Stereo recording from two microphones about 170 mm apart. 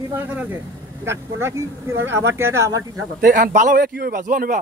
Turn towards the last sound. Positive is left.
turn(degrees=-50)  # may be behind; listen again after turning